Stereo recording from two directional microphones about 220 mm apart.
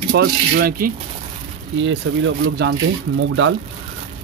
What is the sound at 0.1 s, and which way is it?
Speech, 45° right (ahead or behind).